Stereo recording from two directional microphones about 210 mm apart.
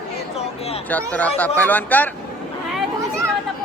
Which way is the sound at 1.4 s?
10° left (ahead or behind).